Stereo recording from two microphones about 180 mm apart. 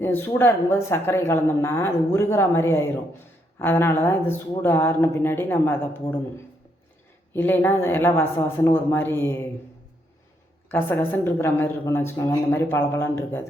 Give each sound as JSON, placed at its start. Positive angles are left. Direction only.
{"t": 0.0, "sound": "speech", "side_deg": 10}
{"t": 10.7, "sound": "speech", "side_deg": 10}